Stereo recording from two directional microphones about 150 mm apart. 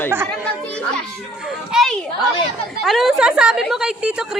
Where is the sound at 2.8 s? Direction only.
Centre (ahead or behind).